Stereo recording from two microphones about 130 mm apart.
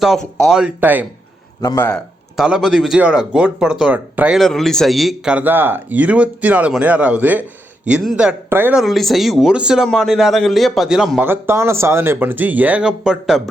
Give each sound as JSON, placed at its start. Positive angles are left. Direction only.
{"t": 0.0, "sound": "speech", "side_deg": 0}
{"t": 1.6, "sound": "speech", "side_deg": 20}
{"t": 2.3, "sound": "a man's voice", "side_deg": -5}
{"t": 4.4, "sound": "a man's voice", "side_deg": 5}
{"t": 8.7, "sound": "speech", "side_deg": 0}
{"t": 11.3, "sound": "a man's voice", "side_deg": -20}